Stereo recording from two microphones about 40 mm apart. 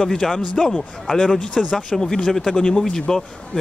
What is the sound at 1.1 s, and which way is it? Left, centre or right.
Speech, left.